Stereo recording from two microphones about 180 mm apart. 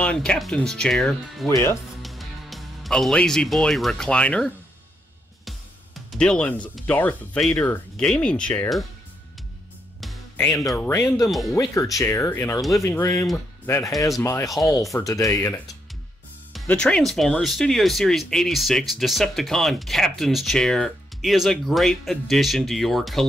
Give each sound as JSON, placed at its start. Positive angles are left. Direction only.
{"t": 0.0, "sound": "speech", "side_deg": 5}
{"t": 1.5, "sound": "speech", "side_deg": 15}
{"t": 2.0, "sound": "music", "side_deg": 0}
{"t": 6.1, "sound": "speech", "side_deg": 5}
{"t": 10.7, "sound": "speech", "side_deg": 5}
{"t": 11.2, "sound": "speech", "side_deg": 0}
{"t": 11.5, "sound": "speech", "side_deg": 15}
{"t": 16.5, "sound": "speech", "side_deg": 5}